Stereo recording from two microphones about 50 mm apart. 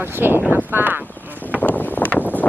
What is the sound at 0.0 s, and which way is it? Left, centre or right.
Speech, right.